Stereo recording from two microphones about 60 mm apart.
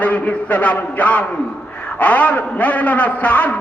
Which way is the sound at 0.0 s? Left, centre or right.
Left.